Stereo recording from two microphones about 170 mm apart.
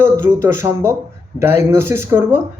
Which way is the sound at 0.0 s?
15° right (ahead or behind).